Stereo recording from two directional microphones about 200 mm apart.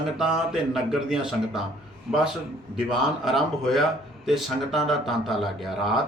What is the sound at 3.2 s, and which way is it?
Speech, centre (ahead or behind).